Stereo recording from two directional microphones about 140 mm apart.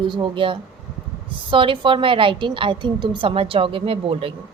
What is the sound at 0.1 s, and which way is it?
A woman's voice, 35° right (ahead or behind).